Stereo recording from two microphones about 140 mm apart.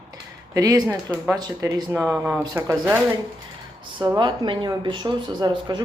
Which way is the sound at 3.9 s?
30° right (ahead or behind).